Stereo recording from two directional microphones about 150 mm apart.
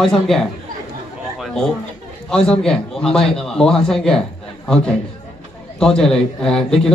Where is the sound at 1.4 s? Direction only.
Centre (ahead or behind).